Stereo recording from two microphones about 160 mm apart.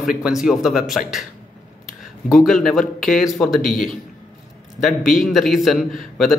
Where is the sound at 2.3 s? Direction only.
Centre (ahead or behind).